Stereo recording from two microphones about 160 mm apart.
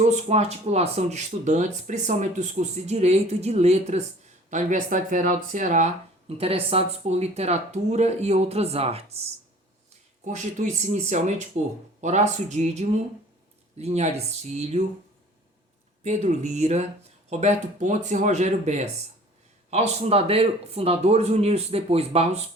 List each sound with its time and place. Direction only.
0.0 s speech: 40° right (ahead or behind)
10.2 s speech: 50° right (ahead or behind)
16.0 s speech: 45° right (ahead or behind)